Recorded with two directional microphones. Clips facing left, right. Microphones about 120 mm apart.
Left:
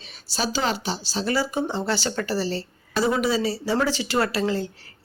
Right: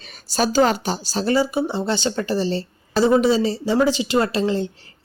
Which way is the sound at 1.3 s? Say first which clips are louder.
Right 5 dB; 15° right (ahead or behind).